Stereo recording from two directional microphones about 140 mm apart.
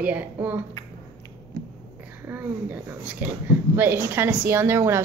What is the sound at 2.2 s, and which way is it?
A woman's voice, 15° right (ahead or behind).